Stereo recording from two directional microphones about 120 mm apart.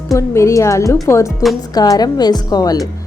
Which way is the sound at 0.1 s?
25° left (ahead or behind).